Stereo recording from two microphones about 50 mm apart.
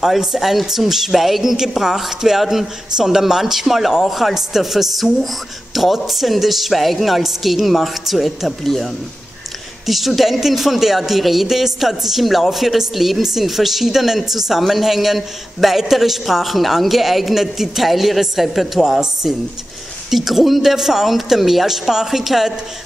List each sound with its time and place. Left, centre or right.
0.0 s speech: centre
9.8 s speech: centre